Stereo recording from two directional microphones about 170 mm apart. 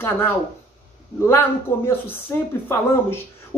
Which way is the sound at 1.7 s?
15° left (ahead or behind).